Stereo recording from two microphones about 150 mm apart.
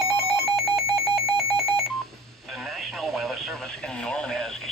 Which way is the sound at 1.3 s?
Centre (ahead or behind).